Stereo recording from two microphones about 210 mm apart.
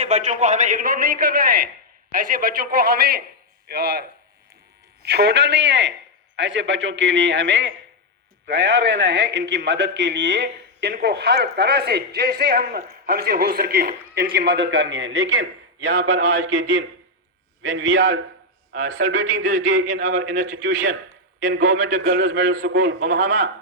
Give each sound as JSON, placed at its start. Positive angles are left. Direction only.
{"t": 0.0, "sound": "a man's voice", "side_deg": -30}
{"t": 5.0, "sound": "a man's voice", "side_deg": -50}
{"t": 16.0, "sound": "a man's voice", "side_deg": -75}
{"t": 19.5, "sound": "a man's voice", "side_deg": -40}
{"t": 20.5, "sound": "a man's voice", "side_deg": -70}
{"t": 23.0, "sound": "a man's voice", "side_deg": -40}